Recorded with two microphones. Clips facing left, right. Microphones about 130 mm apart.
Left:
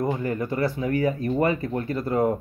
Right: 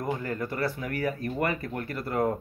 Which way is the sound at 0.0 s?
20° left (ahead or behind).